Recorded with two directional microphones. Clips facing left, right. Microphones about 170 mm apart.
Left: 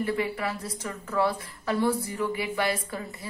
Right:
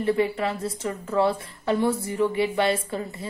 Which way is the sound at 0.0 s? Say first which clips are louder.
Right 5 dB; 25° right (ahead or behind).